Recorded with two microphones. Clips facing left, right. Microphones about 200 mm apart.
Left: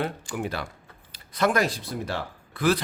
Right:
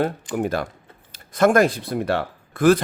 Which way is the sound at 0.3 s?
45° right (ahead or behind).